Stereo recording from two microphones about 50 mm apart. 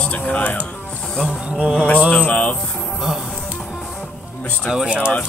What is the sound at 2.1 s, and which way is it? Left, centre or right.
Speech, left.